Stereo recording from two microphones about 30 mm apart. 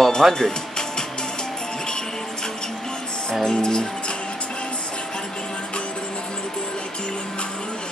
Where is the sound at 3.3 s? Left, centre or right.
Left.